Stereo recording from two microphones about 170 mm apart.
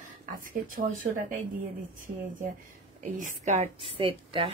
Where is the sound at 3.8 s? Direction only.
30° right (ahead or behind).